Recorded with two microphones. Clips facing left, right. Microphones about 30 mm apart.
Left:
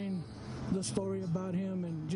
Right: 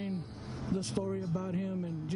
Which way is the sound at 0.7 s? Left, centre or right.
Centre.